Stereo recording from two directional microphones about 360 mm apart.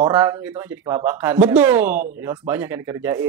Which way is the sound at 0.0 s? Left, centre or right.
Centre.